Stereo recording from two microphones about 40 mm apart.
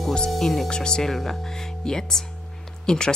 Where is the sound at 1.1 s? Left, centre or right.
Centre.